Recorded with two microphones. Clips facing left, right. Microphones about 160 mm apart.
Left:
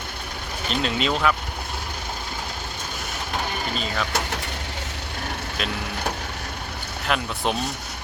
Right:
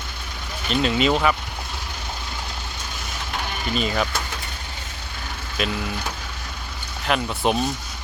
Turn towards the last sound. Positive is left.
turn(degrees=0)  # may be behind; listen again after turning